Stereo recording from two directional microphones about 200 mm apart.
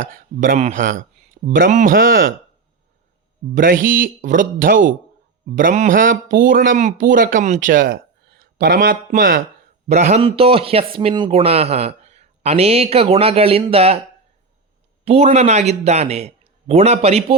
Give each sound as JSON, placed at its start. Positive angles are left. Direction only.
{"t": 0.1, "sound": "speech", "side_deg": -40}
{"t": 3.5, "sound": "a man's voice", "side_deg": -45}
{"t": 15.0, "sound": "a man's voice", "side_deg": -30}